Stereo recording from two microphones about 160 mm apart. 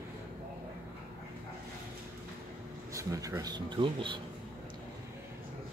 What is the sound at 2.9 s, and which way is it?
Speech, 20° right (ahead or behind).